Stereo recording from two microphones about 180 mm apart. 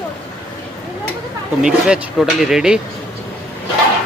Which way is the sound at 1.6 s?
5° right (ahead or behind).